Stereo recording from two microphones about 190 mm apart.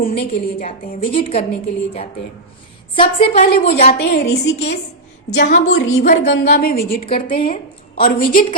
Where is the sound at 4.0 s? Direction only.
60° left (ahead or behind).